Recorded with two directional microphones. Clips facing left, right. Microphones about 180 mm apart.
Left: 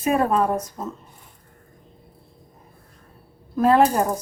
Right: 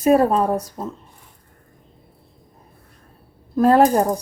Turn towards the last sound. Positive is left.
turn(degrees=-40)  # may be behind; listen again after turning